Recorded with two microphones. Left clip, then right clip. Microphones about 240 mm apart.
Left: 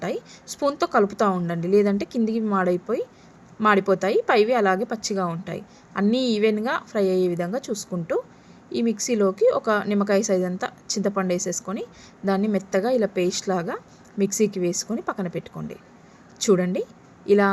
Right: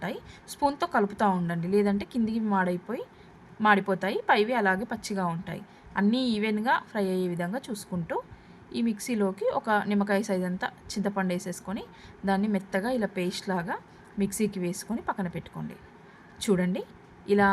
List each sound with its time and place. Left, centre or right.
1.2 s a woman's voice: centre
7.6 s speech: centre
8.7 s a woman's voice: centre